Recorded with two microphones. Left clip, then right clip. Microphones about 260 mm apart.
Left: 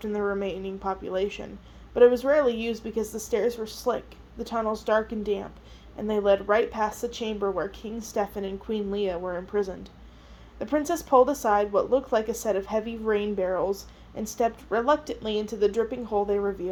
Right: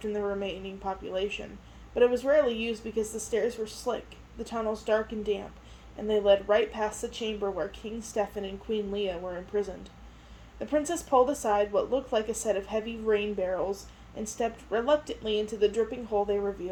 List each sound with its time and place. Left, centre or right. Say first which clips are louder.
0.0 s speech: left 3 dB; left